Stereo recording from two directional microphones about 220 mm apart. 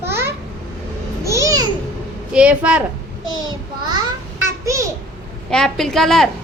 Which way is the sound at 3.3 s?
20° right (ahead or behind).